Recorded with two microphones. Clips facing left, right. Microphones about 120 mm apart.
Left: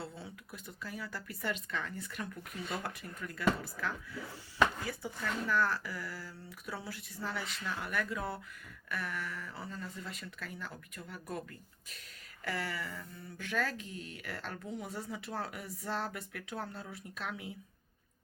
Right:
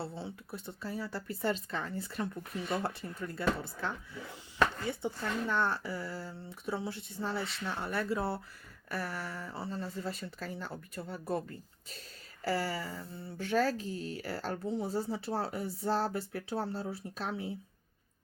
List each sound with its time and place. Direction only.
0.0 s speech: 30° right (ahead or behind)
12.5 s speech: 30° right (ahead or behind)